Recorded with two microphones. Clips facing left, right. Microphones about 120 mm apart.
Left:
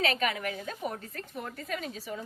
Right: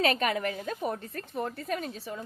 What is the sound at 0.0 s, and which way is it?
Speech, 45° right (ahead or behind).